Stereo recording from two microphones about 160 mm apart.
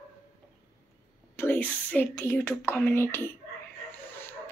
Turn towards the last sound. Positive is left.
turn(degrees=15)  # may be behind; listen again after turning